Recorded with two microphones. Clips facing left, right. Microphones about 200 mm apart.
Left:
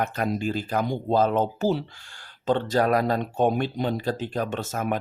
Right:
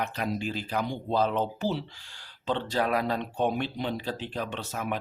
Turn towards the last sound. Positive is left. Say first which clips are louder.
# left 5 dB
turn(degrees=45)  # may be behind; listen again after turning